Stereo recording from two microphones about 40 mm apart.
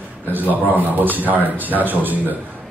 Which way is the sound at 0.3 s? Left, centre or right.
Right.